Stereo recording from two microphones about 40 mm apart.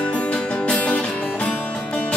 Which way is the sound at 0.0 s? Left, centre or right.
Left.